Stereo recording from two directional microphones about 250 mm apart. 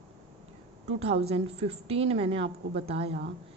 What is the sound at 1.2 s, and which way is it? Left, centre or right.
Speech, right.